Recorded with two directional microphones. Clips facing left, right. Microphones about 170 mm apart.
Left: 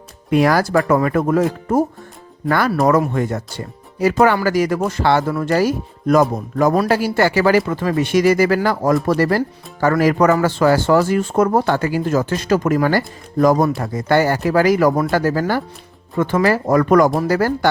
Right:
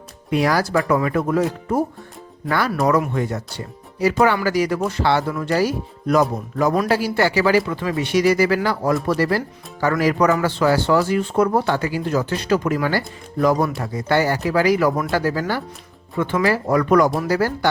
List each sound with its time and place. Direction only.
0.3 s speech: 50° left (ahead or behind)